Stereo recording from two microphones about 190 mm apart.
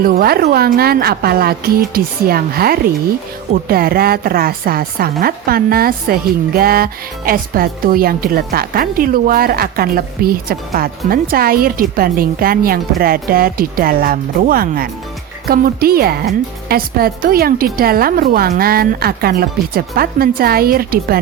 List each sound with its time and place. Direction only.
0.0 s a woman's voice: 50° right (ahead or behind)